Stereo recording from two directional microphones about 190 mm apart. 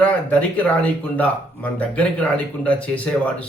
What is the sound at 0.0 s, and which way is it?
Speech, 5° left (ahead or behind).